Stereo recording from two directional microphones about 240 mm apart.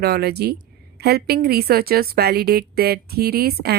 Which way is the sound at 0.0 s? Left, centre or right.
Right.